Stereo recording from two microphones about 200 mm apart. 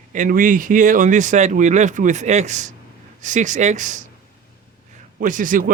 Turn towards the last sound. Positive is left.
turn(degrees=-40)  # may be behind; listen again after turning